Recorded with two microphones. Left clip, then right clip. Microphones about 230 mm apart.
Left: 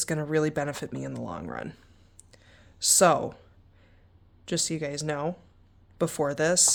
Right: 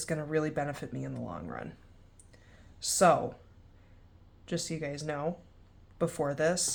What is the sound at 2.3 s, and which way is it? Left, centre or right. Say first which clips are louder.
Clicking: left 3 dB; left.